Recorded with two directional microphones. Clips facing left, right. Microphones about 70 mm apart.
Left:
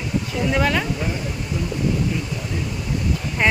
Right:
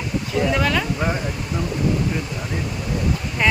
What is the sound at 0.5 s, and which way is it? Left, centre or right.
Speech, centre.